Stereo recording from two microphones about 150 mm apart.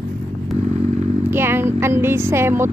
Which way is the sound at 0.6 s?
50° right (ahead or behind).